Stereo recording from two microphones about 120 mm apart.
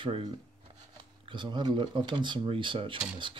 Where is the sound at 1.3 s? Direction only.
40° right (ahead or behind).